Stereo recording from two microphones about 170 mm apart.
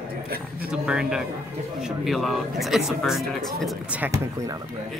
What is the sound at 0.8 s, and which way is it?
Speech, 5° right (ahead or behind).